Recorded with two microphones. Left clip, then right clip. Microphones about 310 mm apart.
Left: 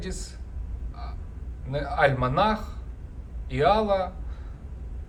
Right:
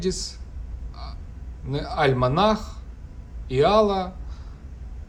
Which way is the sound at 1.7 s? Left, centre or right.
Centre.